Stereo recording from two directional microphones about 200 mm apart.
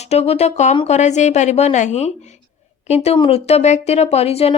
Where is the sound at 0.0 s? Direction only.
30° left (ahead or behind).